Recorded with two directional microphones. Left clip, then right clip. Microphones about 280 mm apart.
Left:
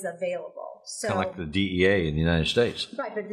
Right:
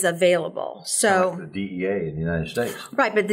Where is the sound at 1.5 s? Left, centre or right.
Left.